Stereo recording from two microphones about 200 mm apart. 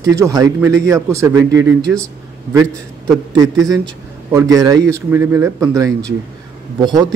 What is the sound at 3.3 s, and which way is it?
A man's voice, 20° right (ahead or behind).